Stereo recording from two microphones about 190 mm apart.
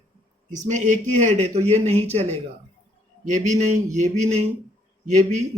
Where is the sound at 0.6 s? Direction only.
40° right (ahead or behind).